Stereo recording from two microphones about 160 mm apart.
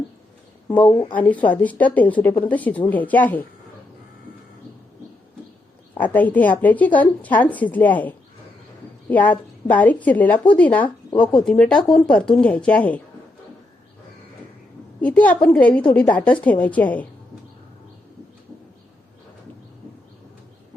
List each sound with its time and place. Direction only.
0.9 s speech: 20° left (ahead or behind)
1.1 s a woman's voice: 10° left (ahead or behind)
6.0 s a woman's voice: 10° left (ahead or behind)
11.1 s speech: 30° left (ahead or behind)
11.4 s speech: 5° left (ahead or behind)
15.0 s a woman's voice: 10° left (ahead or behind)